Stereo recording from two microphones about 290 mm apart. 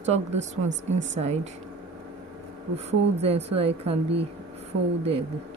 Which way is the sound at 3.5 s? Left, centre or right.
Right.